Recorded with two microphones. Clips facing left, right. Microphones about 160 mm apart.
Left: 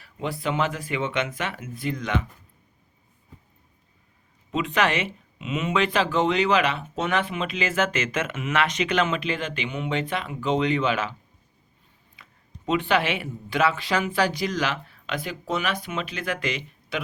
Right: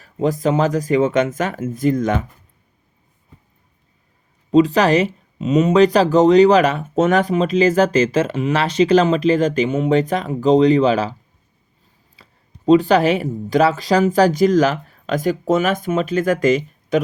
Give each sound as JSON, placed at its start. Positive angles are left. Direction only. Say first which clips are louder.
{"t": 0.0, "sound": "speech", "louder": "right 11 dB", "side_deg": -40}
{"t": 4.5, "sound": "speech", "louder": "right 11 dB", "side_deg": -35}
{"t": 12.1, "sound": "speech", "louder": "right 1 dB", "side_deg": -35}